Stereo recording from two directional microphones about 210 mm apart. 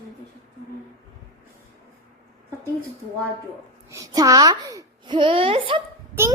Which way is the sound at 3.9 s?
15° right (ahead or behind).